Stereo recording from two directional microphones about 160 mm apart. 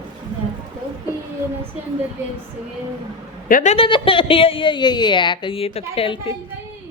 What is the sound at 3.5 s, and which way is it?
Speech, 45° left (ahead or behind).